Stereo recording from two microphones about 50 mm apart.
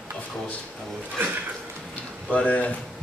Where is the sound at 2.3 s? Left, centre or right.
Left.